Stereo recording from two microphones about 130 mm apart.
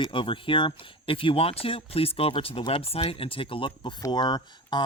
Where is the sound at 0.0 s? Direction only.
40° left (ahead or behind).